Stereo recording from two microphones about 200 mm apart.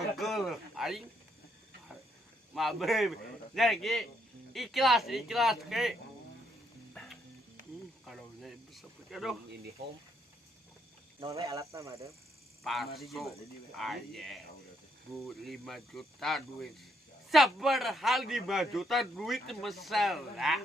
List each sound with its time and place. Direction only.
0.2 s a sound: centre (ahead or behind)
2.6 s a man's voice: centre (ahead or behind)
6.9 s music: 5° left (ahead or behind)
8.0 s a sound: centre (ahead or behind)
11.4 s speech: 15° right (ahead or behind)
12.6 s a man's voice: centre (ahead or behind)